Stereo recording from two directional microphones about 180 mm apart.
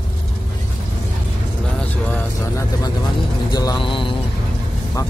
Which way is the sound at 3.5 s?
25° left (ahead or behind).